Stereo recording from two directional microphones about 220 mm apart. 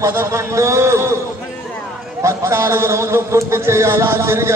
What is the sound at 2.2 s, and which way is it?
A man's voice, 10° right (ahead or behind).